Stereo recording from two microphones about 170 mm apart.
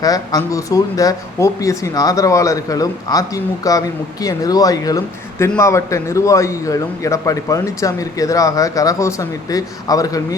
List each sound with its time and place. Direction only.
0.0 s speech: 20° left (ahead or behind)